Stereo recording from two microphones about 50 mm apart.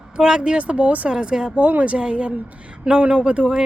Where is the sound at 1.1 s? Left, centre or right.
Centre.